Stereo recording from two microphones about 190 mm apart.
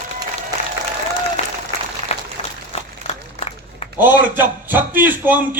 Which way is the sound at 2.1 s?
35° left (ahead or behind).